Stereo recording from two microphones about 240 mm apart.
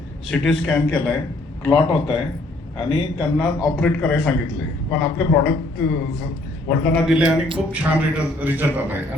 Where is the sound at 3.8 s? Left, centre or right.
Centre.